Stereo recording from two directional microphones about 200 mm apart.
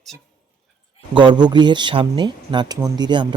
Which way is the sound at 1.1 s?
25° right (ahead or behind).